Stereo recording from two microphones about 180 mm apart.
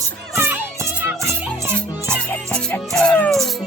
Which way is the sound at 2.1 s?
5° left (ahead or behind).